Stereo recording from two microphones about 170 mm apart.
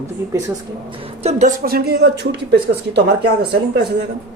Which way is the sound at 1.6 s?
65° right (ahead or behind).